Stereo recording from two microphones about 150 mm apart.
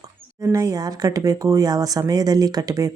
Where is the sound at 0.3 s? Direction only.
20° right (ahead or behind).